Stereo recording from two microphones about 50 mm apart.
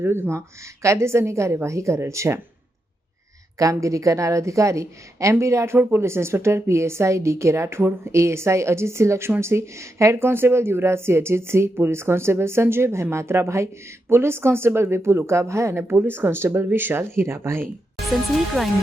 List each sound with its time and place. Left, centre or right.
0.0 s a woman's voice: right
1.6 s speech: right
3.6 s a woman's voice: right
5.3 s a woman's voice: right
6.0 s a woman's voice: right
14.1 s speech: right
15.7 s speech: right
16.6 s speech: right
18.0 s speech: centre